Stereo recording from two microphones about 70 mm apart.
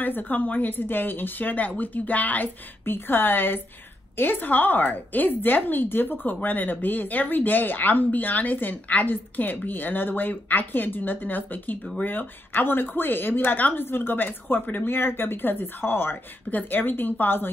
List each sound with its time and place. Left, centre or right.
0.0 s speech: left